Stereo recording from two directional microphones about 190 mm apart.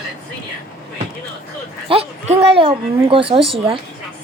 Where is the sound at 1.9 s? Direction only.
30° right (ahead or behind).